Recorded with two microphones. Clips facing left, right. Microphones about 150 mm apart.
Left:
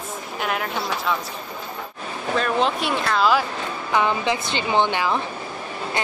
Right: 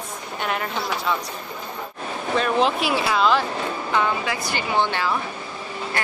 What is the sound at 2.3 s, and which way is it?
Speech, centre (ahead or behind).